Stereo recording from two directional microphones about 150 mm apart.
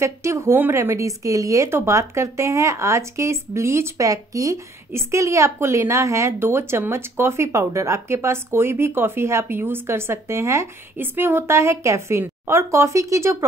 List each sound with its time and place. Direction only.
0.0 s speech: 20° right (ahead or behind)